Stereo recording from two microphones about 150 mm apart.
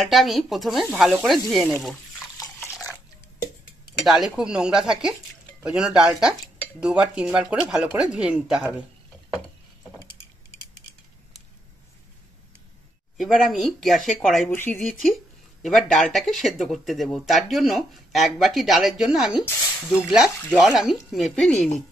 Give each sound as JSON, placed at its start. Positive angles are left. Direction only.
{"t": 0.0, "sound": "speech", "side_deg": 0}
{"t": 2.3, "sound": "a sound", "side_deg": 20}
{"t": 4.0, "sound": "speech", "side_deg": 0}
{"t": 13.2, "sound": "speech", "side_deg": 0}
{"t": 14.5, "sound": "speech", "side_deg": 10}